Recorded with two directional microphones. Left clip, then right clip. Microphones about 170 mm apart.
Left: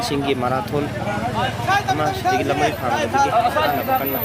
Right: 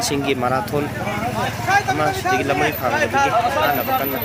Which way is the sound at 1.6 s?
35° left (ahead or behind).